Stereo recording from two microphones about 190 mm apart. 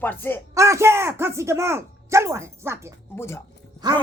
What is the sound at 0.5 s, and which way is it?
Speech, 15° right (ahead or behind).